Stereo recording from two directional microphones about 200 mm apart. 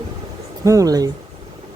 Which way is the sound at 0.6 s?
15° right (ahead or behind).